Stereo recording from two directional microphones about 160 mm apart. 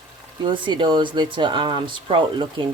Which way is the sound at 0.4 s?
30° right (ahead or behind).